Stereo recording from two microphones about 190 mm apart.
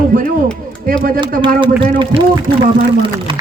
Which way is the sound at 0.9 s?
50° right (ahead or behind).